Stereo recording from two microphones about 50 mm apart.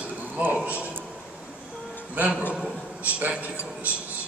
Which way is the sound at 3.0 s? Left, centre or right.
Right.